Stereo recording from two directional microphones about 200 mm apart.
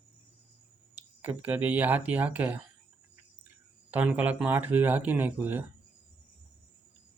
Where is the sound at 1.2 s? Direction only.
10° right (ahead or behind).